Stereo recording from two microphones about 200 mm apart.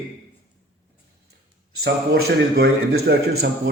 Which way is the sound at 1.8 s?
55° right (ahead or behind).